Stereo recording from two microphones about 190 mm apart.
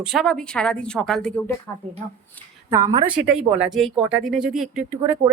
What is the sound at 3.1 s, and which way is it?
Speech, 5° right (ahead or behind).